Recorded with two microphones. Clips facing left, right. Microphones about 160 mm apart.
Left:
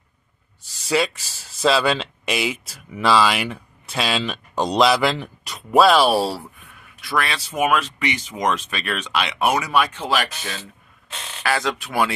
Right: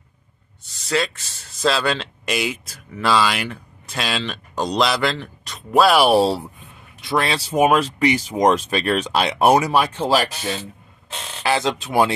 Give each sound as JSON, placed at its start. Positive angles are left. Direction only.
{"t": 0.8, "sound": "speech", "side_deg": 10}
{"t": 5.9, "sound": "speech", "side_deg": -15}